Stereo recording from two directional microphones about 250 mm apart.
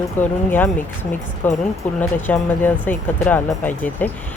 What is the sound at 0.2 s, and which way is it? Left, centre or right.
Speech, centre.